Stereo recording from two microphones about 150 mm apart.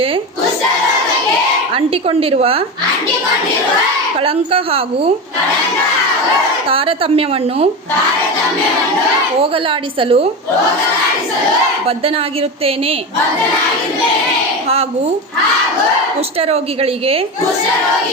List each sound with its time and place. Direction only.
1.7 s a woman's voice: 40° right (ahead or behind)
4.2 s a woman's voice: 40° right (ahead or behind)
6.7 s a woman's voice: 40° right (ahead or behind)
9.4 s a woman's voice: 40° right (ahead or behind)
11.9 s a woman's voice: 40° right (ahead or behind)
16.4 s a woman's voice: 40° right (ahead or behind)